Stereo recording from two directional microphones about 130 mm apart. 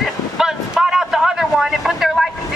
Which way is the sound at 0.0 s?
Centre (ahead or behind).